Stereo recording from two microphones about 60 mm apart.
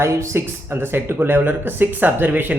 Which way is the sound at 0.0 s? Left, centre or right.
Right.